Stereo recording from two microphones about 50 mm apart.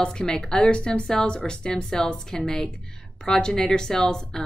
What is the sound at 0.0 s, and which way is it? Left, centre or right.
A woman's voice, centre.